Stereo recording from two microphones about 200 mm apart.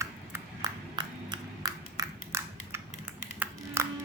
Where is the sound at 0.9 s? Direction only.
20° right (ahead or behind).